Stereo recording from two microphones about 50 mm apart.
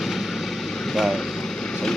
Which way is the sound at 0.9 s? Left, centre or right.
Centre.